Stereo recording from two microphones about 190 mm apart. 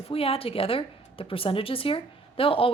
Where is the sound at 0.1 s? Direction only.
30° left (ahead or behind).